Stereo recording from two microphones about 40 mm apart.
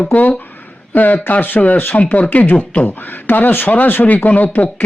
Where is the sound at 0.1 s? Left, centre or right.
Left.